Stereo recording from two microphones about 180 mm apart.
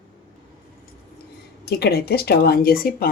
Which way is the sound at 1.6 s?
60° left (ahead or behind).